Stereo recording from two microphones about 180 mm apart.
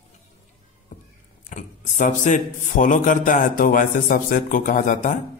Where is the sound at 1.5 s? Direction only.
45° left (ahead or behind).